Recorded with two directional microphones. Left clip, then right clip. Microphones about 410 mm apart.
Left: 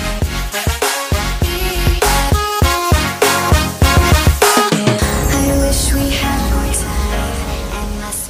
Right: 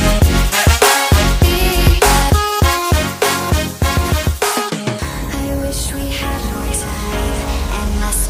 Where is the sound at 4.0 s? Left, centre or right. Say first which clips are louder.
Left 5 dB; left.